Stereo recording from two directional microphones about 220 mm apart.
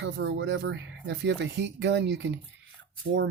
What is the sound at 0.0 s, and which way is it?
Speech, 55° right (ahead or behind).